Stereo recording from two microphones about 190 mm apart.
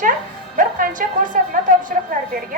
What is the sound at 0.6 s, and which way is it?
Speech, 45° right (ahead or behind).